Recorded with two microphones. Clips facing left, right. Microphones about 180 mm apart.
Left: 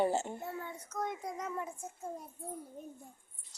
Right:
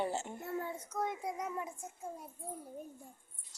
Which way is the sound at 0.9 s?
5° right (ahead or behind).